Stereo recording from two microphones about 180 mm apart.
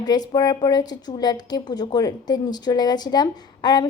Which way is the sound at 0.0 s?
20° left (ahead or behind).